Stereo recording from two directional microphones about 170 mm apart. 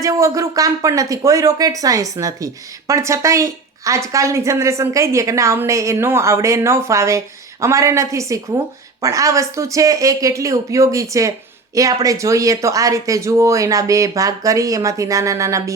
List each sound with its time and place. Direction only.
0.0 s a woman's voice: 20° right (ahead or behind)